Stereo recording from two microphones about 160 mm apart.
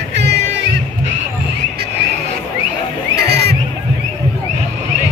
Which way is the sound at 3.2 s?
90° right.